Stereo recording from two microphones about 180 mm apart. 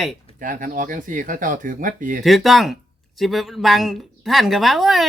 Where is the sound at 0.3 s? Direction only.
50° right (ahead or behind).